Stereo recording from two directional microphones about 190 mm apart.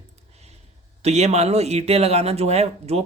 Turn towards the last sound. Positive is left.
turn(degrees=-35)  # may be behind; listen again after turning